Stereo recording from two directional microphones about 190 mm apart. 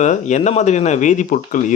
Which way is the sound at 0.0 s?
40° left (ahead or behind).